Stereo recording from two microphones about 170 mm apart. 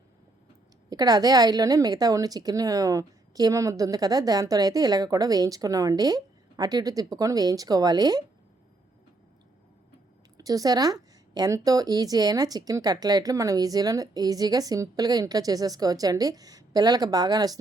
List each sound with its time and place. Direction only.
0.9 s a woman's voice: 20° right (ahead or behind)
10.3 s a woman's voice: 20° right (ahead or behind)